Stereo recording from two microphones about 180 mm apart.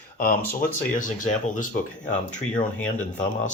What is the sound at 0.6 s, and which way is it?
Speech, 45° left (ahead or behind).